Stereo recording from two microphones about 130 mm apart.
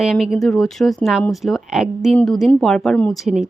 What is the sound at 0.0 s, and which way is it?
Speech, 5° right (ahead or behind).